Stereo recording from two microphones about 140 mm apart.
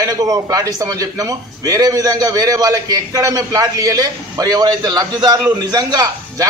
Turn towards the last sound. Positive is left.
turn(degrees=-25)  # may be behind; listen again after turning